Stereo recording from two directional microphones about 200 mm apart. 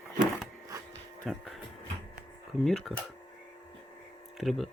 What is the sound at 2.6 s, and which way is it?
Speech, centre (ahead or behind).